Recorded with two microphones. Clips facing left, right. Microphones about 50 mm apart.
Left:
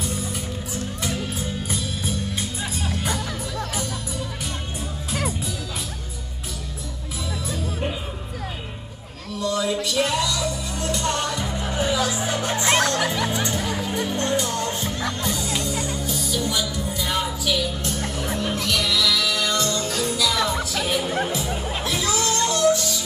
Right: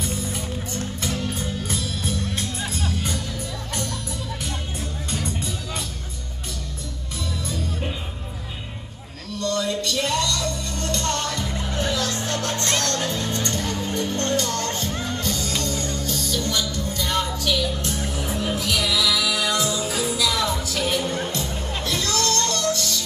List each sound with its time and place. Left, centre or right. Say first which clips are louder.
0.0 s music: even; centre
7.4 s music: left 3 dB; centre
9.3 s music: left 1 dB; centre